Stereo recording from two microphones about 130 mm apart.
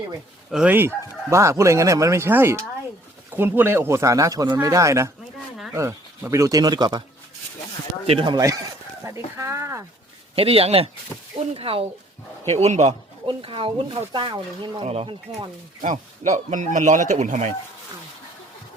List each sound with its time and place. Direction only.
0.5 s speech: 10° right (ahead or behind); by 7.0 s 30° right (ahead or behind)
8.0 s speech: 45° right (ahead or behind)
8.4 s speech: 25° right (ahead or behind)
10.3 s speech: 50° right (ahead or behind)
12.5 s speech: 60° right (ahead or behind)
13.2 s speech: 40° right (ahead or behind)
14.8 s speech: 50° right (ahead or behind)
15.8 s speech: 75° right (ahead or behind)